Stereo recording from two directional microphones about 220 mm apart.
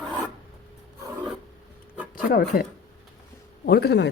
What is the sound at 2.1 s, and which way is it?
Speech, 40° left (ahead or behind).